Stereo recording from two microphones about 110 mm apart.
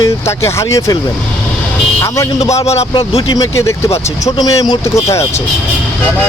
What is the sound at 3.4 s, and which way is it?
Speech, 25° left (ahead or behind).